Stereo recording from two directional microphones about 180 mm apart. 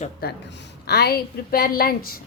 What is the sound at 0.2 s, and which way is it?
A woman's voice, 55° left (ahead or behind).